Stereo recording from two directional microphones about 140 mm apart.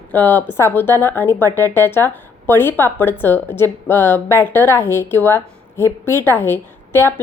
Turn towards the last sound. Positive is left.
turn(degrees=15)  # may be behind; listen again after turning